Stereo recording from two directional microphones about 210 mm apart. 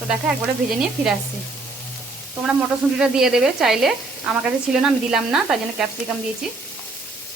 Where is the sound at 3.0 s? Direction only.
Centre (ahead or behind).